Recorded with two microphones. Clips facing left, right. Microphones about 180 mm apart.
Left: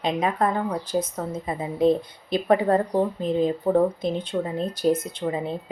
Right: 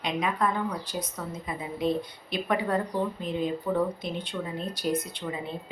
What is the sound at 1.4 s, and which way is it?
Speech, 30° left (ahead or behind).